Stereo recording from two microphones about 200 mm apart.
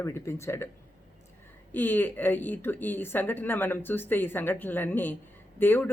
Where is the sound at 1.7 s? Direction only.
10° left (ahead or behind).